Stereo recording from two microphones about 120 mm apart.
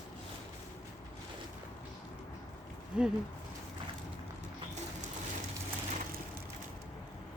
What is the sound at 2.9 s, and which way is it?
Speech, 5° right (ahead or behind).